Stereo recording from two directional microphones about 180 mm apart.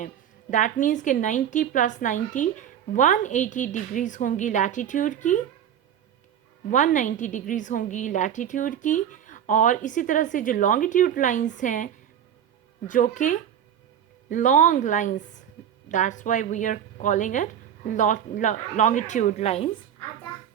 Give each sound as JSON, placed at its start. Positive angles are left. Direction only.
{"t": 0.5, "sound": "a woman's voice", "side_deg": 45}
{"t": 6.7, "sound": "a woman's voice", "side_deg": 45}
{"t": 12.9, "sound": "a woman's voice", "side_deg": 45}